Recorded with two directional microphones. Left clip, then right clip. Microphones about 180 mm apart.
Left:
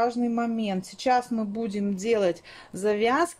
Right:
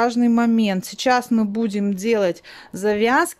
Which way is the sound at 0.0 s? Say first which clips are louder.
Right 7 dB; 50° right (ahead or behind).